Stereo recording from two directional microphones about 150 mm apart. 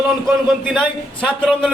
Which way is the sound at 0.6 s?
5° left (ahead or behind).